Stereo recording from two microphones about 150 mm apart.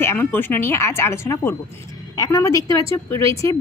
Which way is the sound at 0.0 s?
15° left (ahead or behind).